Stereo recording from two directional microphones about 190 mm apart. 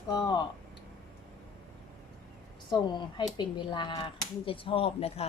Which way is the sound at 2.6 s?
25° left (ahead or behind).